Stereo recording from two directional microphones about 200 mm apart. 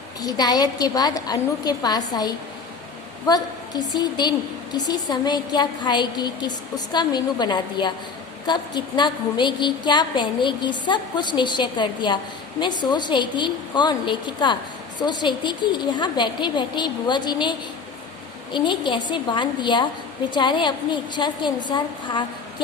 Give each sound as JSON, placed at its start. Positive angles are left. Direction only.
{"t": 0.2, "sound": "a woman's voice", "side_deg": 20}
{"t": 18.5, "sound": "a woman's voice", "side_deg": 25}